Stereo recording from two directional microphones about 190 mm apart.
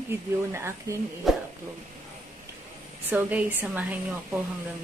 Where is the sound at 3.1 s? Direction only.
10° right (ahead or behind).